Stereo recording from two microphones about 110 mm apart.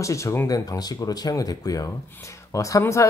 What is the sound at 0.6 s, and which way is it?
A man's voice, 35° left (ahead or behind).